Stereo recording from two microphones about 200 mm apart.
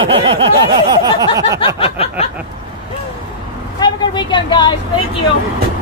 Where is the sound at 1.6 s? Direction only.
25° left (ahead or behind).